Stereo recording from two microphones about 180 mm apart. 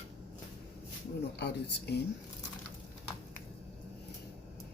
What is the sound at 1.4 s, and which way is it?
Speech, 70° left (ahead or behind).